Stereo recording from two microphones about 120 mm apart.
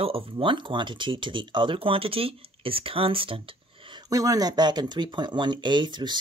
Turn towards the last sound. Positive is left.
turn(degrees=-40)  # may be behind; listen again after turning